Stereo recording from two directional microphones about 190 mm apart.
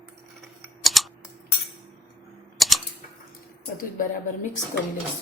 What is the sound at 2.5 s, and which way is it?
Typewriter, centre (ahead or behind).